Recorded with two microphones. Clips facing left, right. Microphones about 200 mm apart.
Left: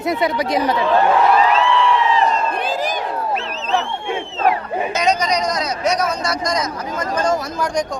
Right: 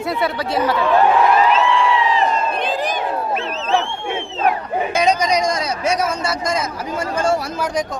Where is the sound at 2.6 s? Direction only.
Centre (ahead or behind).